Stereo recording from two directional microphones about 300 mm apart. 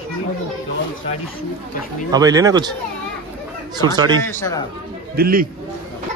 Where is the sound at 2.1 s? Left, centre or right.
Centre.